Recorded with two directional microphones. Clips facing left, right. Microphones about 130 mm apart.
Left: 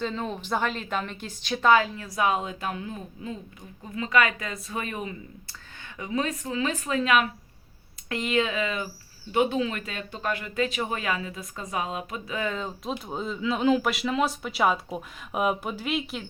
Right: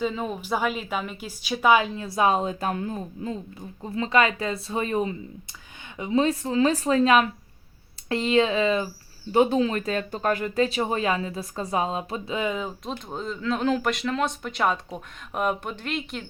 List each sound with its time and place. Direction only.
0.0 s a woman's voice: 5° right (ahead or behind); by 12.4 s 30° right (ahead or behind)
12.4 s a woman's voice: 10° right (ahead or behind)
12.9 s speech: 5° left (ahead or behind)